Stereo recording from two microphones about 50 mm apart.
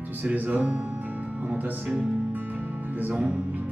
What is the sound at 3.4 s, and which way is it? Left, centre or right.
Music, right.